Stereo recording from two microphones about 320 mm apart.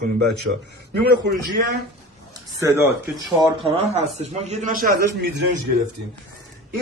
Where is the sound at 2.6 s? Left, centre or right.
Centre.